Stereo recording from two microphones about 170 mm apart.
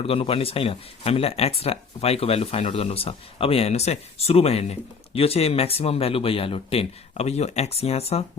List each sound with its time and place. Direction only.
0.0 s speech: 35° left (ahead or behind)